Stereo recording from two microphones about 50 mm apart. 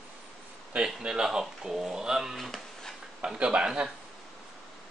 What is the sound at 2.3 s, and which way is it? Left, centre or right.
Speech, centre.